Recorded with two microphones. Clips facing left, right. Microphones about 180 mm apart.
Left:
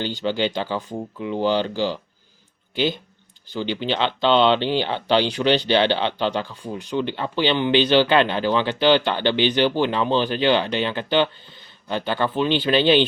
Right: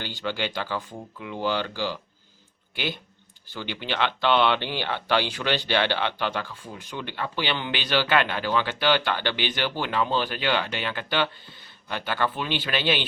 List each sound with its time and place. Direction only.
0.0 s speech: 20° left (ahead or behind)